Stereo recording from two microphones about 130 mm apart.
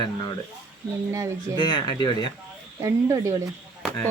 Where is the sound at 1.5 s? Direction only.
35° left (ahead or behind).